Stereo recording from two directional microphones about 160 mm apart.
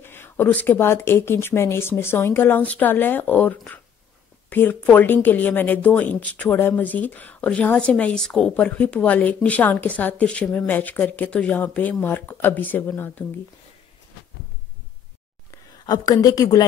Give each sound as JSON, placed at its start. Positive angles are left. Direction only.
{"t": 0.0, "sound": "speech", "side_deg": 15}
{"t": 15.5, "sound": "speech", "side_deg": 25}